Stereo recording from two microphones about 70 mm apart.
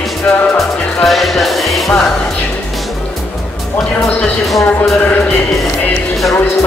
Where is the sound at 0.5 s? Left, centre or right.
Centre.